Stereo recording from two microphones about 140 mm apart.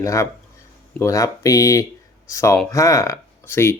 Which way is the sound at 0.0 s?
20° left (ahead or behind).